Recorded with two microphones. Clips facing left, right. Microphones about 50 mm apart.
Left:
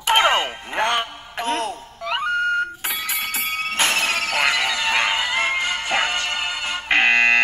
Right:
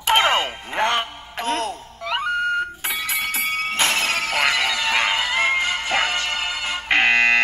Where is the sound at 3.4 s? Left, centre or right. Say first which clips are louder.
Even; left.